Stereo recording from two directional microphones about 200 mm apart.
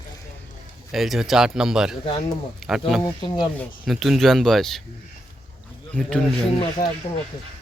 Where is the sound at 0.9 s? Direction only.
Centre (ahead or behind).